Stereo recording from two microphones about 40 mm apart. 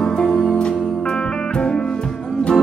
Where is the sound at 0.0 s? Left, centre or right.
Centre.